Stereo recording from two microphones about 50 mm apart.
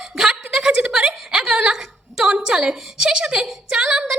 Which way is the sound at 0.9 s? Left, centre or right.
Centre.